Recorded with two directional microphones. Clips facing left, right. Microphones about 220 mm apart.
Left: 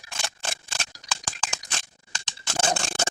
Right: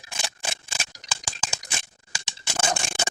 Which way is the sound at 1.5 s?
10° right (ahead or behind).